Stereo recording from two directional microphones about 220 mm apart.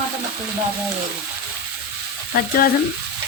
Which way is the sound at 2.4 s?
45° left (ahead or behind).